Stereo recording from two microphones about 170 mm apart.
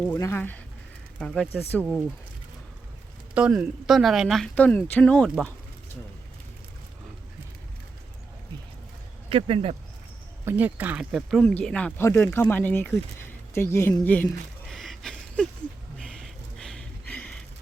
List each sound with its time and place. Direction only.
0.0 s speech: 15° left (ahead or behind)
3.3 s speech: 5° right (ahead or behind)
9.3 s speech: 35° right (ahead or behind)
10.4 s speech: 10° right (ahead or behind)
16.0 s a sound: 5° left (ahead or behind)